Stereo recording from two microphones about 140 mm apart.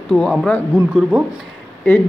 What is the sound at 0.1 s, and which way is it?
Speech, 5° left (ahead or behind).